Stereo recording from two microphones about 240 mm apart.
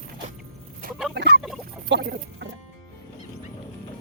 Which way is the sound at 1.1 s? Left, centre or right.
Right.